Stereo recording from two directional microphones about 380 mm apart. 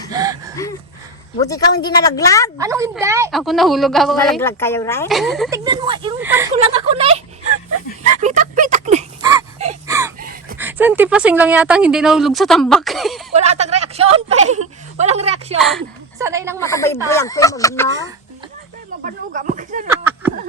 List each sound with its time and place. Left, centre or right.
0.1 s gasp: centre
1.5 s speech: centre
2.6 s a woman's voice: centre
5.6 s speech: centre
8.2 s a sound: centre
10.2 s a sound: right
10.6 s a woman's voice: centre
13.3 s a sound: centre
16.1 s a woman's voice: centre
16.6 s speech: centre
19.0 s speech: right
19.9 s a sound: centre